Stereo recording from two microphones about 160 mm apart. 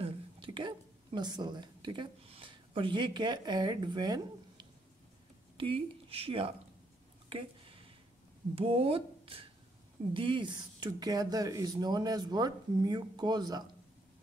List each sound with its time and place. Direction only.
0.0 s a woman's voice: 30° right (ahead or behind)
7.2 s a sound: 35° right (ahead or behind)
8.5 s speech: 35° right (ahead or behind)